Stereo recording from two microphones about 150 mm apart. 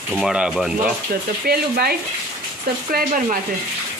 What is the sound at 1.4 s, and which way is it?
Speech, 90° right.